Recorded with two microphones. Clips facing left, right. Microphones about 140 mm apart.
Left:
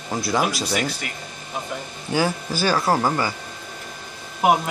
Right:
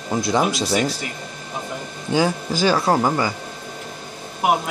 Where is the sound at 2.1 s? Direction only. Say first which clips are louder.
Right 3 dB; 20° right (ahead or behind).